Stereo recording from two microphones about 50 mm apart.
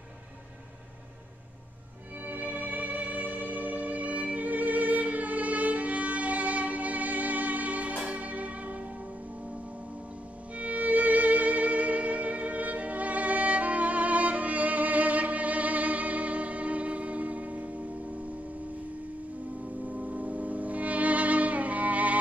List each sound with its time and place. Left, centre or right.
2.2 s music: right
10.5 s music: right
19.9 s music: right